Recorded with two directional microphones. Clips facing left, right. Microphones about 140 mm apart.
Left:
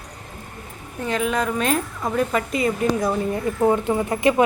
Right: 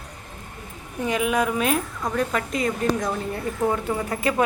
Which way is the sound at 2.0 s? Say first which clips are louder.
Left 3 dB; 5° left (ahead or behind).